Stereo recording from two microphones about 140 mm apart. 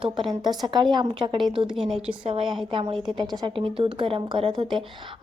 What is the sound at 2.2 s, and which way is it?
Speech, 40° right (ahead or behind).